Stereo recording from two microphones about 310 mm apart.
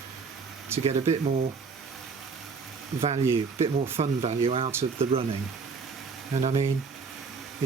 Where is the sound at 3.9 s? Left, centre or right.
Centre.